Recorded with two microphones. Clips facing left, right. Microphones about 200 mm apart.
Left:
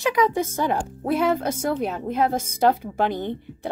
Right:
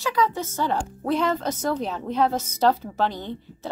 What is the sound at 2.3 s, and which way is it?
Speech, 50° left (ahead or behind).